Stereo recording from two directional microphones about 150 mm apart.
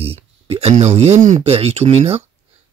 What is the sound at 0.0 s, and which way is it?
Speech, 40° right (ahead or behind).